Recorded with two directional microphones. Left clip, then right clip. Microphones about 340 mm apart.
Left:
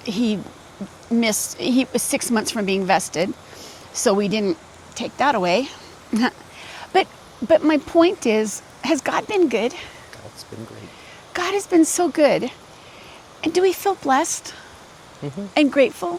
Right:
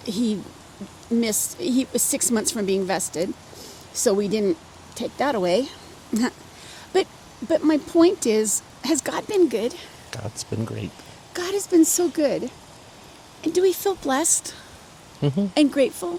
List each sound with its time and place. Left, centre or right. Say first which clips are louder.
0.0 s speech: left 3 dB; centre
1.2 s a woman's voice: left 5 dB; left
11.3 s a woman's voice: left 2 dB; left
13.4 s speech: left 2 dB; left
15.2 s speech: right 7 dB; right
15.5 s a woman's voice: left 4 dB; left